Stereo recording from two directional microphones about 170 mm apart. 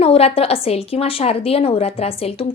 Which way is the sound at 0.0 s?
35° left (ahead or behind).